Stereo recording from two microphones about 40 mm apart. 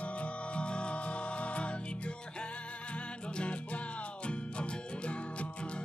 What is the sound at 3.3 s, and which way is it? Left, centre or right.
Music, left.